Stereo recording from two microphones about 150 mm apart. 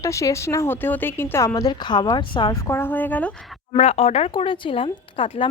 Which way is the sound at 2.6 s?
15° left (ahead or behind).